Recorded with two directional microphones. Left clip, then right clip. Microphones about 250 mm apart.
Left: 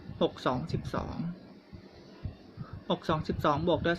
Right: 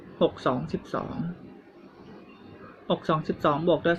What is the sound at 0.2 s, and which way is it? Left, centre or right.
Speech, centre.